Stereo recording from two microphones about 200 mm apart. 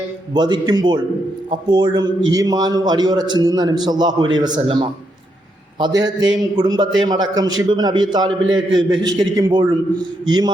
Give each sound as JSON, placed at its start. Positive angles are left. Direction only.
{"t": 0.3, "sound": "a man's voice", "side_deg": -20}